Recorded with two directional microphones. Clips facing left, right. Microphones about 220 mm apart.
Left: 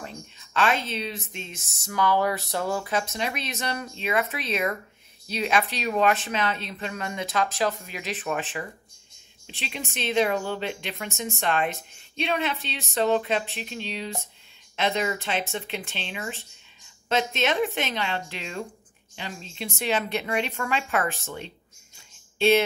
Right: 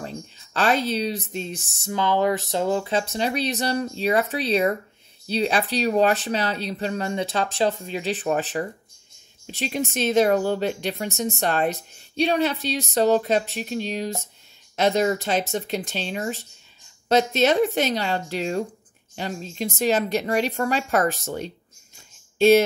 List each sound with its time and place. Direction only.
0.0 s speech: 35° right (ahead or behind)